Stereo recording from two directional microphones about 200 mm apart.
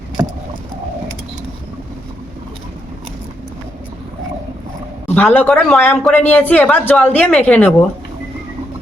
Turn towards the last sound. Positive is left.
turn(degrees=5)  # may be behind; listen again after turning